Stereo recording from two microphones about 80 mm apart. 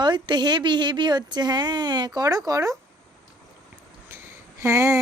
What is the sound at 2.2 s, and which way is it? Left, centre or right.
Speech, right.